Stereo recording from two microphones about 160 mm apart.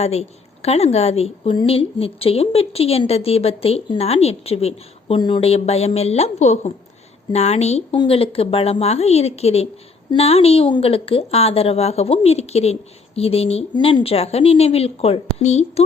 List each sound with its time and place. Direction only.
0.0 s a woman's voice: 40° left (ahead or behind)